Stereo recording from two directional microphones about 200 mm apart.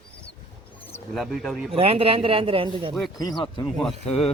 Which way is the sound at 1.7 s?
30° right (ahead or behind).